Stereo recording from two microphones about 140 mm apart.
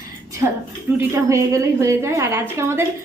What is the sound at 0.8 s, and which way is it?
A woman's voice, 15° right (ahead or behind).